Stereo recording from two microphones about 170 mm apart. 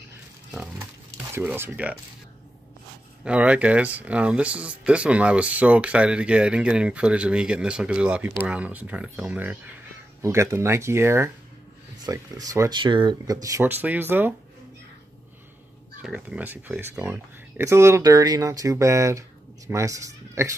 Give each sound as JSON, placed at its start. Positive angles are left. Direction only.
{"t": 1.3, "sound": "speech", "side_deg": -10}
{"t": 3.3, "sound": "speech", "side_deg": -10}
{"t": 16.0, "sound": "speech", "side_deg": -5}